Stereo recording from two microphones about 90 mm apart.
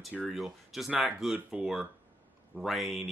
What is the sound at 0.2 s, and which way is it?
Speech, centre (ahead or behind).